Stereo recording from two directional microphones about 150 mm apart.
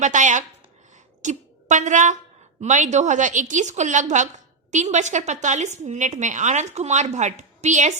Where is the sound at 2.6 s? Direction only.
55° right (ahead or behind).